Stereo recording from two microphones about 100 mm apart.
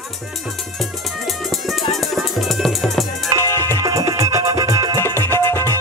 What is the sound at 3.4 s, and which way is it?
Music, 25° left (ahead or behind).